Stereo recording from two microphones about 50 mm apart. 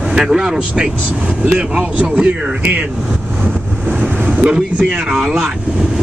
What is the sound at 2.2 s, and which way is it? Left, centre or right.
Speech, right.